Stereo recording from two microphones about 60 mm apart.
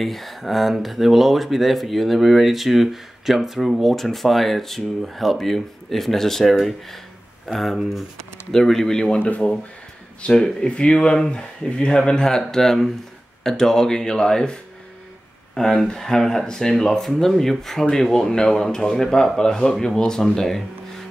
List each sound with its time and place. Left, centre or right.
0.0 s speech: centre
9.2 s speech: left; by 20.6 s centre